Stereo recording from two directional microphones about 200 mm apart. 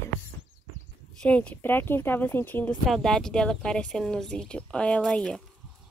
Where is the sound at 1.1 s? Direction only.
5° left (ahead or behind).